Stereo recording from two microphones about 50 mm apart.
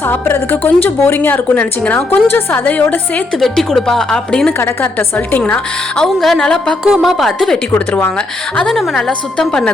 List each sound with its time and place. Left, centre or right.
0.0 s a woman's voice: left
2.0 s a woman's voice: left
3.3 s a woman's voice: centre
4.5 s a woman's voice: left
4.9 s a woman's voice: left
6.1 s a woman's voice: centre
6.8 s a woman's voice: centre
7.9 s a woman's voice: left
8.7 s a woman's voice: centre